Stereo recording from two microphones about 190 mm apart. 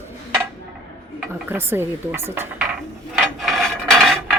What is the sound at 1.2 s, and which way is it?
Dishes, 10° right (ahead or behind).